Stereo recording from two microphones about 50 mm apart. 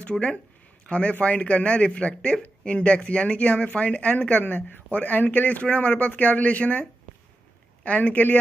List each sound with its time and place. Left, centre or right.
0.1 s speech: centre